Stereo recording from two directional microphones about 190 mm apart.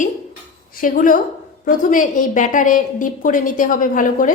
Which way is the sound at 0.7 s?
45° left (ahead or behind).